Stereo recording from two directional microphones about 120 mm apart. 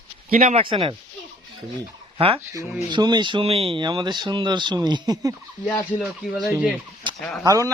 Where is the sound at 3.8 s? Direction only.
40° right (ahead or behind).